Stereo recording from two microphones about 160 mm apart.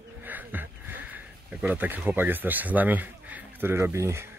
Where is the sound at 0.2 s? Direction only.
10° right (ahead or behind).